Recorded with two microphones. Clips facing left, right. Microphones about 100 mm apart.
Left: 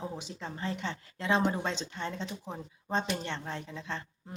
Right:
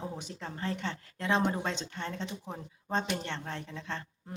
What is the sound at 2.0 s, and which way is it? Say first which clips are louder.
A woman's voice: left 1 dB; 15° left (ahead or behind).